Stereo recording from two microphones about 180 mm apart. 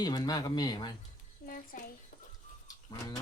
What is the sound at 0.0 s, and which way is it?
Speech, 20° left (ahead or behind).